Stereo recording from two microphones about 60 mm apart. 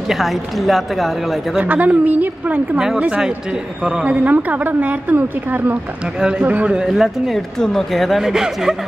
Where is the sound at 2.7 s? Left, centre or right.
Centre; by 5.8 s right.